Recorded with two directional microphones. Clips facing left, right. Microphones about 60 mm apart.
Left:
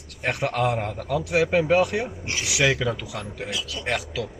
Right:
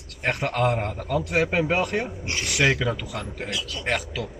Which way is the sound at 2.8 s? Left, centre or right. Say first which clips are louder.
Even; right.